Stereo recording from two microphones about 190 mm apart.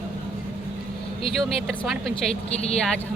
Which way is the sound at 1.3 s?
Centre (ahead or behind).